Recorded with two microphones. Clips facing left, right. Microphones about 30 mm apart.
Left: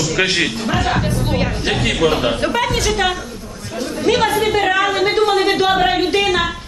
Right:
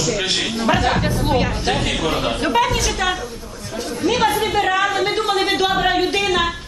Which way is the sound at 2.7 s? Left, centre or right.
Left.